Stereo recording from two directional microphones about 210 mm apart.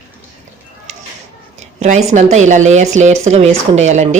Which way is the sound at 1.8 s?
35° right (ahead or behind).